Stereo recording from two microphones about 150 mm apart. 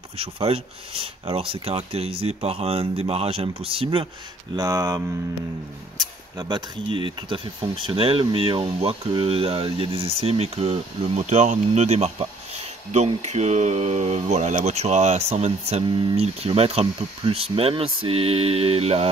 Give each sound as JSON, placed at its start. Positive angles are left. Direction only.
{"t": 0.2, "sound": "speech", "side_deg": -40}
{"t": 4.6, "sound": "speech", "side_deg": -25}
{"t": 15.8, "sound": "speech", "side_deg": -30}